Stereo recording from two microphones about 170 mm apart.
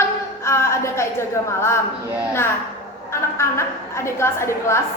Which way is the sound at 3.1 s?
15° left (ahead or behind).